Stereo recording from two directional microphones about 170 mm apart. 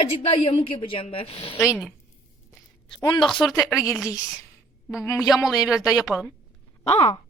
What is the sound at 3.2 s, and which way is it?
Speech, centre (ahead or behind).